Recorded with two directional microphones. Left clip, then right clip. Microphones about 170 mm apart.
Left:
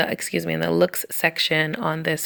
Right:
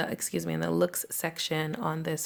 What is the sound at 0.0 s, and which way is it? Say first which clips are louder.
Speech: left 9 dB; 20° left (ahead or behind).